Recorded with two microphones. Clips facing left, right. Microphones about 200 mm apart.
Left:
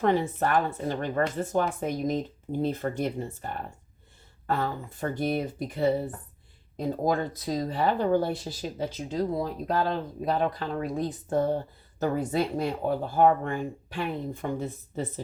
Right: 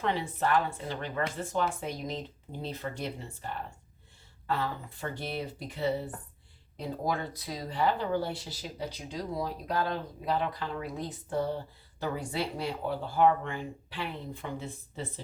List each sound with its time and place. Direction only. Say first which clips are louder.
0.0 s speech: left 6 dB; 45° left (ahead or behind)